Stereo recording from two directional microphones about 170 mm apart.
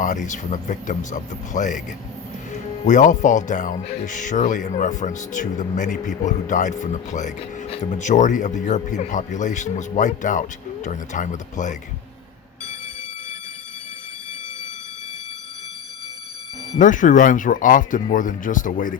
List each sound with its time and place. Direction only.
0.0 s speech: 50° left (ahead or behind)
2.8 s speech: 45° left (ahead or behind)
16.7 s speech: 50° left (ahead or behind)